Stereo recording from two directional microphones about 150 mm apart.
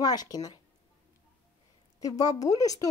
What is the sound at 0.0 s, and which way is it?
Speech, 25° left (ahead or behind).